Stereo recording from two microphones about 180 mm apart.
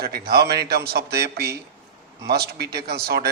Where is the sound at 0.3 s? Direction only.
60° right (ahead or behind).